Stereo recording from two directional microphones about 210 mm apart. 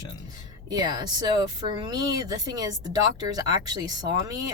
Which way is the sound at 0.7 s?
20° right (ahead or behind).